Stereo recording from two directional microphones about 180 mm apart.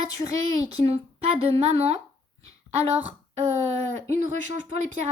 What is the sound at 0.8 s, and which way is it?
A woman's voice, 35° right (ahead or behind).